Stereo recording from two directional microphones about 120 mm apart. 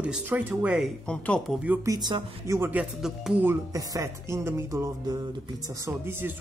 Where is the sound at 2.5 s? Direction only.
15° right (ahead or behind).